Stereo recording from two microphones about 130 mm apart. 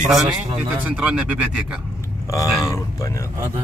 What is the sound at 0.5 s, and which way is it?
Speech, 10° right (ahead or behind).